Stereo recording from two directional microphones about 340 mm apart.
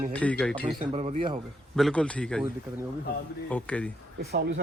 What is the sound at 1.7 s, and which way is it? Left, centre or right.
Speech, centre.